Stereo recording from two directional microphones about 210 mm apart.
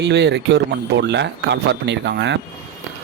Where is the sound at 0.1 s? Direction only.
55° right (ahead or behind).